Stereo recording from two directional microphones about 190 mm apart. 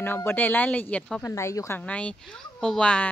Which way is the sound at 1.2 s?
15° left (ahead or behind).